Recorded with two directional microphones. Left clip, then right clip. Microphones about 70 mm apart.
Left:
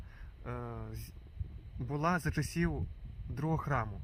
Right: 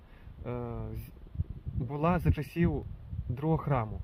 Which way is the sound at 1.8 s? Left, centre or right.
Left.